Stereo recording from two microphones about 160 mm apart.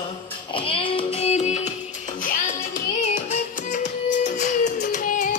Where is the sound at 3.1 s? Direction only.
45° left (ahead or behind).